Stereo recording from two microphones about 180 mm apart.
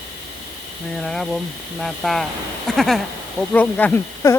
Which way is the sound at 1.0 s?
Centre (ahead or behind).